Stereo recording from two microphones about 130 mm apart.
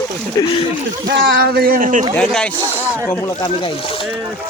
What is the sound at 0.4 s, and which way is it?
Speech, 25° left (ahead or behind).